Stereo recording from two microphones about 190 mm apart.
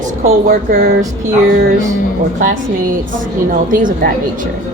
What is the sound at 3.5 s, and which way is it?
Speech, 45° right (ahead or behind).